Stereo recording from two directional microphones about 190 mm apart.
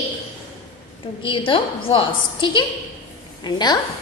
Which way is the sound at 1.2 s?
25° left (ahead or behind).